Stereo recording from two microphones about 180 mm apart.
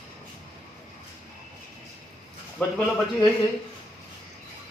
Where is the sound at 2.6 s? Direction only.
5° left (ahead or behind).